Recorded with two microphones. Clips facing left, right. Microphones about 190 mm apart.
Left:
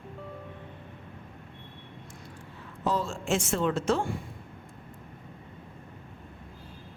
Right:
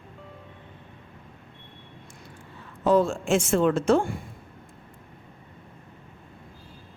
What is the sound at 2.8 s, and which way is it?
Speech, 55° right (ahead or behind).